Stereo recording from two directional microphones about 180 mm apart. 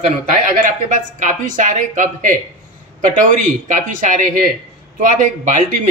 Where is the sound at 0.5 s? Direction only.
45° right (ahead or behind).